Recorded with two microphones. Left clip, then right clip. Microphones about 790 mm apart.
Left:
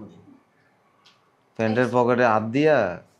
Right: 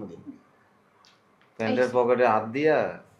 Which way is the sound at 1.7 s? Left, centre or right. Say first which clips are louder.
Left 1 dB; left.